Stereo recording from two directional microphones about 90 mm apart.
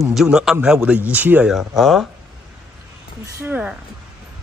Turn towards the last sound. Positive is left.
turn(degrees=-20)  # may be behind; listen again after turning